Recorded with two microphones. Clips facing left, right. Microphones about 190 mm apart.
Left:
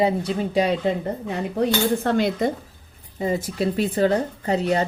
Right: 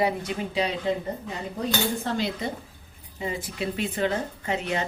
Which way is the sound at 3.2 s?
40° left (ahead or behind).